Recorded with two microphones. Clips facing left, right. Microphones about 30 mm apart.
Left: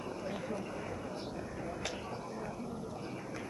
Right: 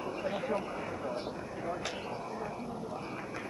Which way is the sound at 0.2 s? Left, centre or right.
Right.